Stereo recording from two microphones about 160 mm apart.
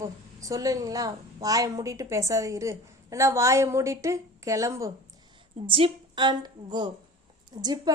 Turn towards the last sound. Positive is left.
turn(degrees=-25)  # may be behind; listen again after turning